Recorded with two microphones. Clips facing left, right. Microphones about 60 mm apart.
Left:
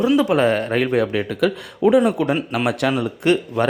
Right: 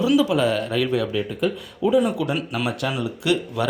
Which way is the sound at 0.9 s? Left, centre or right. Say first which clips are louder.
Left 4 dB; left.